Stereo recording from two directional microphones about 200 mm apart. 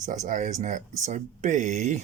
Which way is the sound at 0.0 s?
40° right (ahead or behind).